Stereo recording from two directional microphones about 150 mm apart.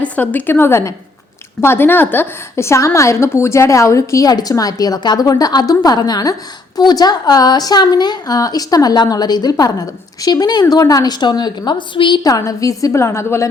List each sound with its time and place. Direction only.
0.0 s a woman's voice: 10° left (ahead or behind)